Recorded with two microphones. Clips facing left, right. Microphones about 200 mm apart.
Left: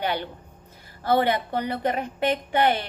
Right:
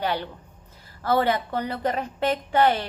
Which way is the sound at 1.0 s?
25° left (ahead or behind).